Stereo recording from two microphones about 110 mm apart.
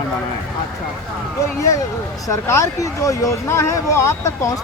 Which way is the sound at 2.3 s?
30° left (ahead or behind).